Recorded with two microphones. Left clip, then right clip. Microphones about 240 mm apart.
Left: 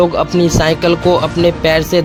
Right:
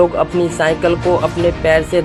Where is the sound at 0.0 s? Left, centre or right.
Left.